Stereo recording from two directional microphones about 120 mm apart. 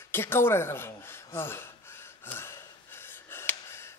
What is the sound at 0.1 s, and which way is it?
Gasp, 20° left (ahead or behind).